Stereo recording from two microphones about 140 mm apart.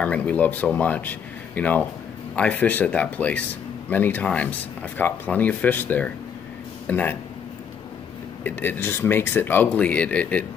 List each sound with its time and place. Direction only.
0.0 s speech: 10° left (ahead or behind)
8.5 s speech: 15° left (ahead or behind)